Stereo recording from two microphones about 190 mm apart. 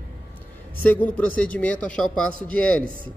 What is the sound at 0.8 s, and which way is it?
A man's voice, 10° left (ahead or behind).